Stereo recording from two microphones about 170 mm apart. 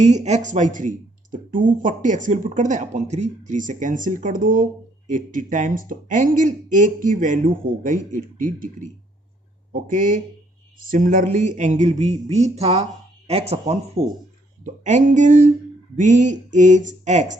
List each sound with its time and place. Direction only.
0.0 s speech: 40° right (ahead or behind)